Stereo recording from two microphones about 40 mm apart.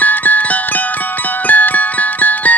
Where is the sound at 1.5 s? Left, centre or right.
Left.